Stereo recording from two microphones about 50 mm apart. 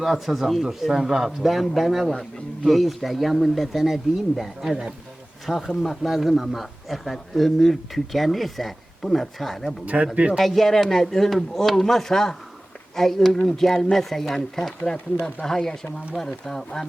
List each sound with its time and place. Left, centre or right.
0.0 s a man's voice: centre
9.8 s speech: right
10.3 s a man's voice: centre